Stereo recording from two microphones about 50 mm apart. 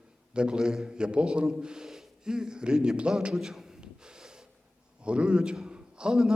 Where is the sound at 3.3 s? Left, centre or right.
Centre.